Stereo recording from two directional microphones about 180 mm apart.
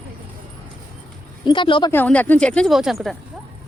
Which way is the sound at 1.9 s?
10° left (ahead or behind).